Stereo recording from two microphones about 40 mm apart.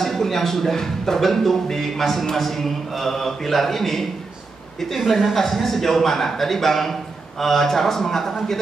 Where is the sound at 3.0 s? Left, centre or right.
Centre.